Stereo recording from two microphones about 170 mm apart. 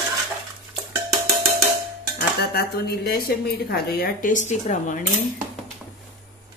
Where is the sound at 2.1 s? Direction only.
65° left (ahead or behind); by 5.0 s 45° left (ahead or behind).